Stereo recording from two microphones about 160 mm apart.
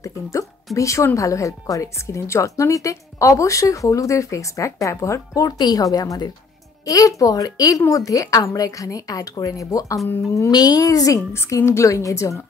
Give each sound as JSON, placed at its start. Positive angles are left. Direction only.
{"t": 0.7, "sound": "speech", "side_deg": 20}